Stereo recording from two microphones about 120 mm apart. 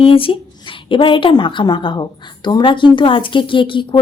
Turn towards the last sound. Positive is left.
turn(degrees=45)  # may be behind; listen again after turning